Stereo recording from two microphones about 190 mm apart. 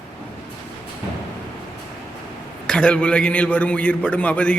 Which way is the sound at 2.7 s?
5° left (ahead or behind).